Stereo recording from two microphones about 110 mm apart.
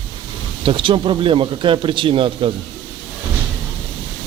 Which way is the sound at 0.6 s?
50° right (ahead or behind).